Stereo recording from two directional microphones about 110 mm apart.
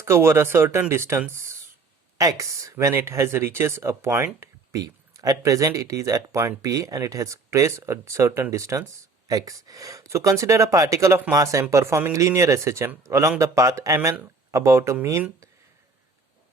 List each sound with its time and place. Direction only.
0.0 s speech: 25° right (ahead or behind)
1.3 s a sound: 25° right (ahead or behind)
2.4 s speech: 30° right (ahead or behind)